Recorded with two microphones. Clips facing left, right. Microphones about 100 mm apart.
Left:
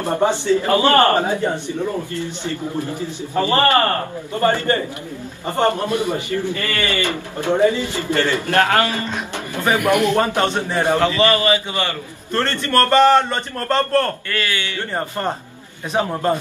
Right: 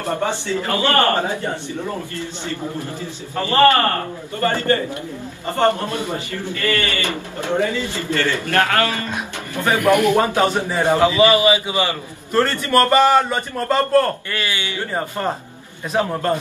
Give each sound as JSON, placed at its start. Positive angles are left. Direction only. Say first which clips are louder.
{"t": 0.0, "sound": "a man's voice", "louder": "left 4 dB", "side_deg": 20}
{"t": 3.0, "sound": "a man's voice", "louder": "left 4 dB", "side_deg": 20}
{"t": 10.0, "sound": "a man's voice", "louder": "right 1 dB", "side_deg": -10}
{"t": 10.8, "sound": "a man's voice", "louder": "right 2 dB", "side_deg": -20}
{"t": 14.3, "sound": "a man's voice", "louder": "left 1 dB", "side_deg": -15}
{"t": 15.0, "sound": "speech", "louder": "even", "side_deg": -5}